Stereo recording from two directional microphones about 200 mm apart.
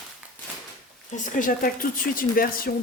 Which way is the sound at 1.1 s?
40° left (ahead or behind).